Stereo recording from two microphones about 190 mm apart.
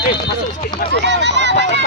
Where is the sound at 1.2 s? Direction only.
65° right (ahead or behind).